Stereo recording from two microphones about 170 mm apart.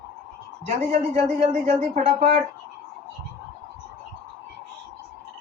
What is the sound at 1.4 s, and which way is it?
A woman's voice, 45° right (ahead or behind).